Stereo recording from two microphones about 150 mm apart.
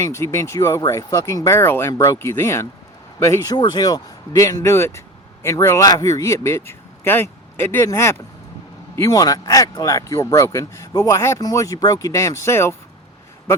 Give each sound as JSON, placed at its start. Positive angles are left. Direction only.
{"t": 0.0, "sound": "speech", "side_deg": 20}